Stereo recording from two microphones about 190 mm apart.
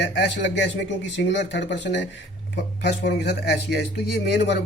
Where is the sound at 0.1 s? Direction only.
65° left (ahead or behind).